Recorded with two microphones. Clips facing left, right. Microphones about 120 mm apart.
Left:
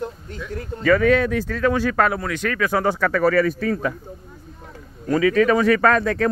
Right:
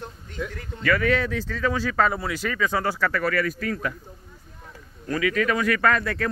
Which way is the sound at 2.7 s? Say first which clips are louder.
Left 7 dB; 15° left (ahead or behind).